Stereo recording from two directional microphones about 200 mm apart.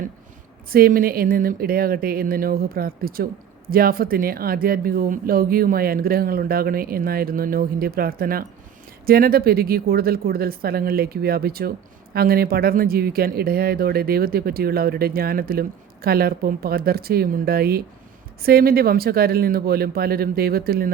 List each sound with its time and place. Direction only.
0.7 s speech: 45° right (ahead or behind)